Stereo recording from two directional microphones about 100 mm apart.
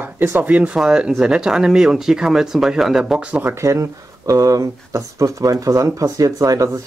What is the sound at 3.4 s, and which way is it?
Speech, 30° right (ahead or behind).